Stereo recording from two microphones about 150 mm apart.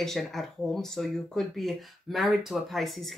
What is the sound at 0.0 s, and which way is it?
Speech, centre (ahead or behind).